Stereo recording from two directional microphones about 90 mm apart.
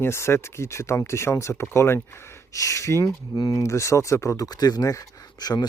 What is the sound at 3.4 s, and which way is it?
Speech, 45° left (ahead or behind).